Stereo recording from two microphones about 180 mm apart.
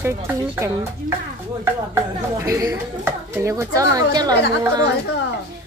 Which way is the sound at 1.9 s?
15° right (ahead or behind).